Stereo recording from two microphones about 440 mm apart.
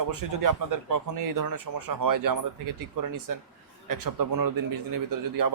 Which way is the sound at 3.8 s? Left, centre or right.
Right.